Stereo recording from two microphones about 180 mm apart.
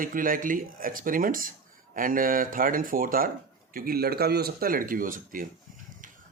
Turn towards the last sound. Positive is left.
turn(degrees=-50)  # may be behind; listen again after turning